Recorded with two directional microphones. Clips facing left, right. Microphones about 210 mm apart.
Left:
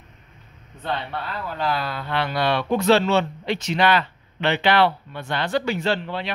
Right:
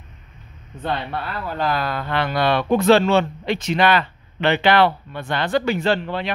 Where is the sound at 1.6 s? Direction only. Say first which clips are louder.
Right 3 dB; 50° right (ahead or behind).